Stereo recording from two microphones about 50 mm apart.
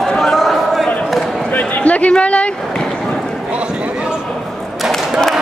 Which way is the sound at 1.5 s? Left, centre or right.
Left.